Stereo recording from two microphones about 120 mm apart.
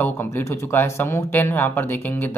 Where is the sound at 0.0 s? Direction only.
20° left (ahead or behind).